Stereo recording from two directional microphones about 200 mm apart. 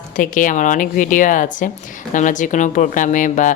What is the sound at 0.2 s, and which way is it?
A woman's voice, 40° left (ahead or behind).